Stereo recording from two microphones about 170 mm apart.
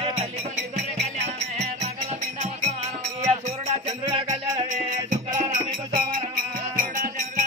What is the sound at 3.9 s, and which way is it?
Music, 20° right (ahead or behind).